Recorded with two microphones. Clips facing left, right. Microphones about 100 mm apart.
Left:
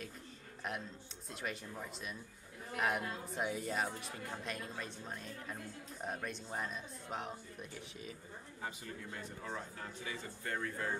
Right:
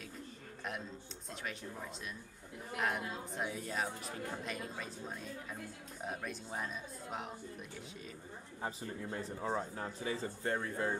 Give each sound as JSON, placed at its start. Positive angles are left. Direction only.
{"t": 1.3, "sound": "speech", "side_deg": 0}
{"t": 8.6, "sound": "a man's voice", "side_deg": -30}